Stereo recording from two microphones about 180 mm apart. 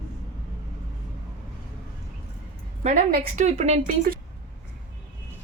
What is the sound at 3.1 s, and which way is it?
Speech, 55° right (ahead or behind).